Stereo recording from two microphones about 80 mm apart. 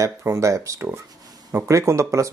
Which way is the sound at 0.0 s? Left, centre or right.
Right.